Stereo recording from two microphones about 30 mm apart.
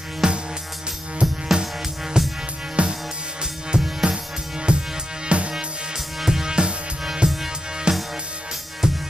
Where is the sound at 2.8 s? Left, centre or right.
Right.